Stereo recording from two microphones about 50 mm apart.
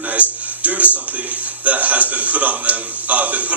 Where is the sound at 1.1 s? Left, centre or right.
Right.